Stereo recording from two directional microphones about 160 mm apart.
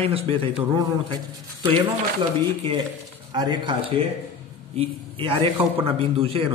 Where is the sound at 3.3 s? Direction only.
30° right (ahead or behind).